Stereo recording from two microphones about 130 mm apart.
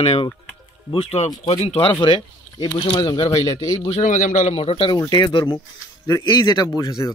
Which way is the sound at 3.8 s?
65° left (ahead or behind).